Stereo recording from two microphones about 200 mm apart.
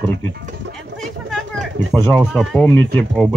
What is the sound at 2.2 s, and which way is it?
Speech, centre (ahead or behind).